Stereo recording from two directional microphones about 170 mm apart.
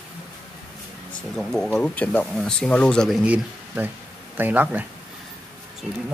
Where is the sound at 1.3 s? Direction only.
5° left (ahead or behind).